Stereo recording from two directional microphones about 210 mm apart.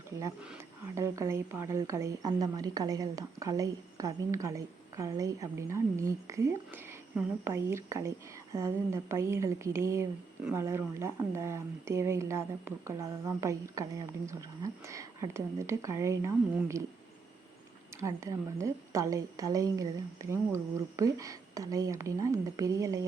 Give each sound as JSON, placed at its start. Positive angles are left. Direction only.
{"t": 0.9, "sound": "speech", "side_deg": -15}
{"t": 18.0, "sound": "speech", "side_deg": -15}